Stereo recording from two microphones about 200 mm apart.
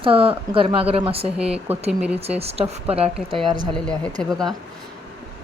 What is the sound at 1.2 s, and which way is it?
Speech, 5° right (ahead or behind).